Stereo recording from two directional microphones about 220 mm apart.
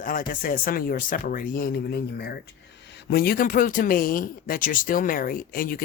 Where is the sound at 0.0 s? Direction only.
40° left (ahead or behind).